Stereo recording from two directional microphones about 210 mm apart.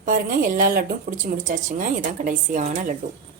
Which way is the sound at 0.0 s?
40° right (ahead or behind).